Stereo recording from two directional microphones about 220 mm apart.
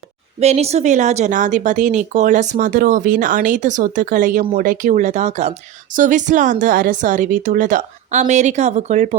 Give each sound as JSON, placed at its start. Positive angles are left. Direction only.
{"t": 0.3, "sound": "a woman's voice", "side_deg": -30}